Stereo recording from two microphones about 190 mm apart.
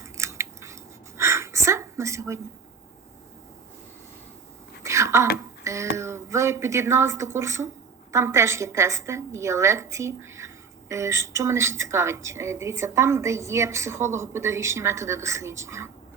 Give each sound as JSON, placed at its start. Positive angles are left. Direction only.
{"t": 0.0, "sound": "scissors", "side_deg": -15}
{"t": 4.8, "sound": "a sound", "side_deg": -15}
{"t": 5.6, "sound": "a woman's voice", "side_deg": -15}